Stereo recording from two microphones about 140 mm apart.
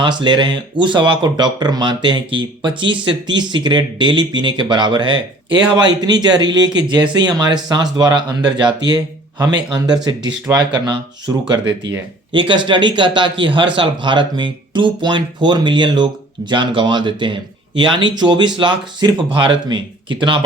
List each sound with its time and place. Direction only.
0.0 s speech: 35° right (ahead or behind)
12.3 s speech: 35° right (ahead or behind)